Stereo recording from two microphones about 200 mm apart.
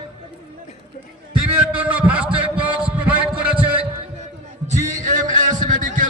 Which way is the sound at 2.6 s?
5° right (ahead or behind).